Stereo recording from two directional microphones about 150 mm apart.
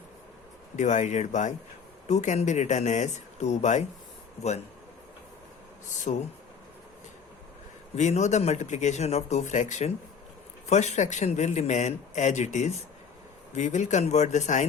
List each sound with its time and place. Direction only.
0.8 s a man's voice: 55° left (ahead or behind)
6.1 s a man's voice: 50° left (ahead or behind)
7.9 s a man's voice: 50° left (ahead or behind)